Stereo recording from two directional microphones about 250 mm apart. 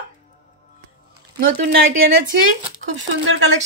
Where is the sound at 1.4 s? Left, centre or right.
Right.